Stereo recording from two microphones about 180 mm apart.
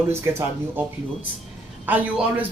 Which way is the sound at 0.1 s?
15° right (ahead or behind).